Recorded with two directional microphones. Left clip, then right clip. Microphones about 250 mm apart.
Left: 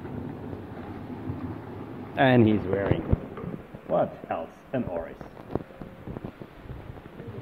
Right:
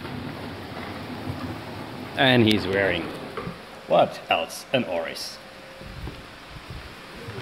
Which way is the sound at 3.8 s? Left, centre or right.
Right.